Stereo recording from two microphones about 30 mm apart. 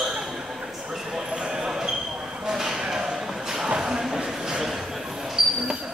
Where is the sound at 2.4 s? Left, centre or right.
Centre.